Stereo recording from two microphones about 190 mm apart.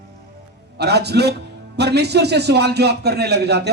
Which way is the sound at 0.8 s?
60° right (ahead or behind).